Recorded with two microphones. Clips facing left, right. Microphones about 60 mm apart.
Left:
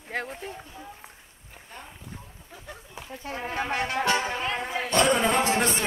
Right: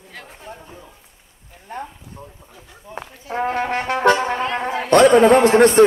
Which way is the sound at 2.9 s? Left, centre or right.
Right.